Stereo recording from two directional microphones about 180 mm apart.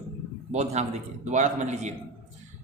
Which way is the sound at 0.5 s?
40° right (ahead or behind).